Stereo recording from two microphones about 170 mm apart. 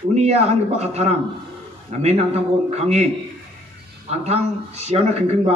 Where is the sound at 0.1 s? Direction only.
40° right (ahead or behind).